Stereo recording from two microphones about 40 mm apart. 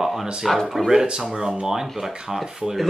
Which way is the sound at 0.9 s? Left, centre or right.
Centre.